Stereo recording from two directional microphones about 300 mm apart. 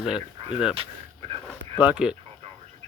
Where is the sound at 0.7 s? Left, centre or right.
Centre.